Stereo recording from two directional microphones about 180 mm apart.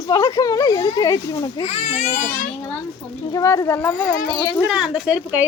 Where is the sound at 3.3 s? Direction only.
20° left (ahead or behind).